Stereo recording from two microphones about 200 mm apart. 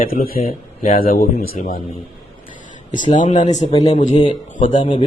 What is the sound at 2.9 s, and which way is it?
A man's voice, 35° left (ahead or behind).